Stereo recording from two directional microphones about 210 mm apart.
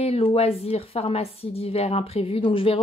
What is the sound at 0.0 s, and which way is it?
Speech, 30° left (ahead or behind).